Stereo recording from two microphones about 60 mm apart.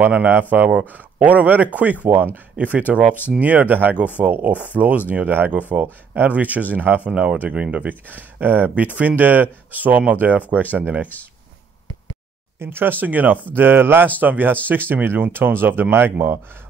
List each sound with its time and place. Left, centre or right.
0.0 s speech: right
7.1 s speech: centre
12.5 s speech: right